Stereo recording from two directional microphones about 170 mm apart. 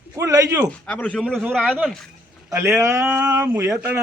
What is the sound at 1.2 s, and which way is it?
Speech, 5° right (ahead or behind).